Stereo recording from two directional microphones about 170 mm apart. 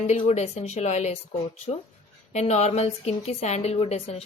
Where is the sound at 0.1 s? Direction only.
40° left (ahead or behind).